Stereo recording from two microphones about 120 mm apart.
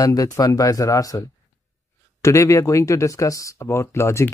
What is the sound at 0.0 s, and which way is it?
Speech, 30° left (ahead or behind).